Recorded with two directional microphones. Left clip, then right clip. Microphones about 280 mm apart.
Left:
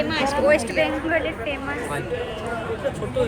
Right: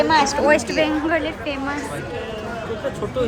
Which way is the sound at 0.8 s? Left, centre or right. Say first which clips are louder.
Right 2 dB; right.